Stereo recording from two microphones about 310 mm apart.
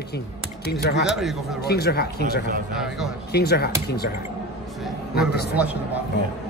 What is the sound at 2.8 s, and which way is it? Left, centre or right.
Speech, centre.